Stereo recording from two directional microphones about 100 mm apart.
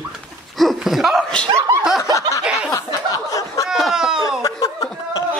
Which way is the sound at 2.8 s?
35° left (ahead or behind).